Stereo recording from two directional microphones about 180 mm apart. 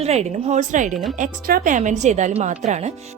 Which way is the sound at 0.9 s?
Centre (ahead or behind).